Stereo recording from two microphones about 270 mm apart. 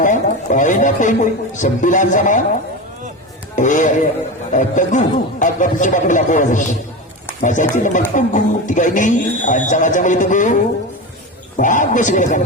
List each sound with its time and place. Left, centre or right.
0.0 s speech: left
3.5 s a man's voice: left